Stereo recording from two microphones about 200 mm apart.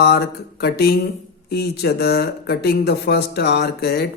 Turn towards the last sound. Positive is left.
turn(degrees=55)  # may be behind; listen again after turning